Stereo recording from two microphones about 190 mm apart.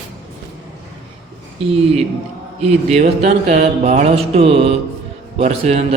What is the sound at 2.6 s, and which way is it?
A man's voice, 35° right (ahead or behind).